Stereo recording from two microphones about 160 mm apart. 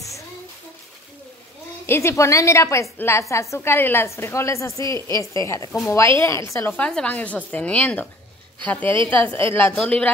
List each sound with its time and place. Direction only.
1.9 s a woman's voice: 15° left (ahead or behind)
6.8 s a woman's voice: 5° left (ahead or behind)
8.8 s a woman's voice: 30° right (ahead or behind)
9.2 s a woman's voice: 10° left (ahead or behind)